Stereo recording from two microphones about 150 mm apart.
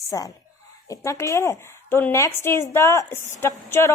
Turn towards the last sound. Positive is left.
turn(degrees=15)  # may be behind; listen again after turning